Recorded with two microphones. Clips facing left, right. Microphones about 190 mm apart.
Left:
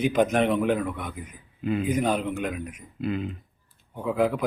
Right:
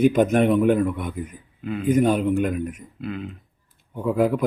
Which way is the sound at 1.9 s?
45° right (ahead or behind).